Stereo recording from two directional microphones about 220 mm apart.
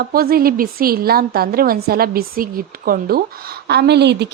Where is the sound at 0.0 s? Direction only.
45° right (ahead or behind).